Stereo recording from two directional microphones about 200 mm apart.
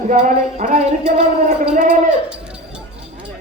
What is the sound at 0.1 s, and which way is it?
Speech, 40° right (ahead or behind).